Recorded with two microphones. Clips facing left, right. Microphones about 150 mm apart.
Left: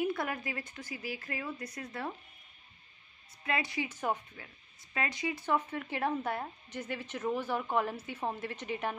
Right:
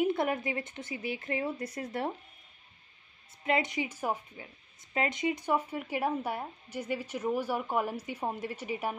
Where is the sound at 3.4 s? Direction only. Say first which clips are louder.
Right 4 dB; 20° right (ahead or behind).